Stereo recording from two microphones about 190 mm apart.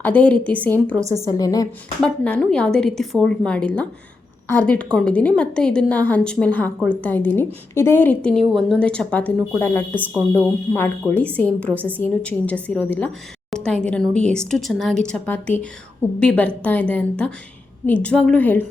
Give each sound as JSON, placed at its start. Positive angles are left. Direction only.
{"t": 0.0, "sound": "a woman's voice", "side_deg": 10}
{"t": 1.4, "sound": "a woman's voice", "side_deg": 20}
{"t": 2.0, "sound": "a woman's voice", "side_deg": 5}
{"t": 13.5, "sound": "a sound", "side_deg": 5}
{"t": 13.8, "sound": "a woman's voice", "side_deg": 5}